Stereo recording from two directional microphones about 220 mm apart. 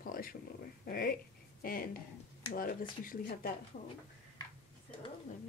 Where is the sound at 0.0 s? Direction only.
40° left (ahead or behind).